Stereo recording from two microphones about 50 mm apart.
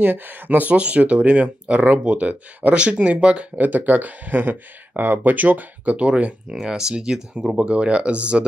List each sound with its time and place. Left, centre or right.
0.0 s speech: right
0.7 s speech: right
3.5 s speech: right
6.5 s speech: centre